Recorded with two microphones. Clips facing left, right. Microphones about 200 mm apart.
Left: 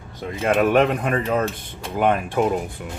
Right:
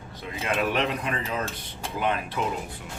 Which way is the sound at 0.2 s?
50° left (ahead or behind).